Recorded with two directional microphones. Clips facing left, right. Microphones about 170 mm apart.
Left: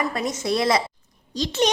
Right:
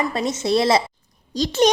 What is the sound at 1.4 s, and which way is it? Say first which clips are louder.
Speech: right 5 dB; 40° right (ahead or behind).